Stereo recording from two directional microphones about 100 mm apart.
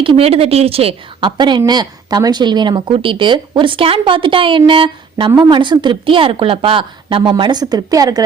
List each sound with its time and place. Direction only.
0.0 s a woman's voice: 70° right (ahead or behind)
1.4 s speech: 50° right (ahead or behind)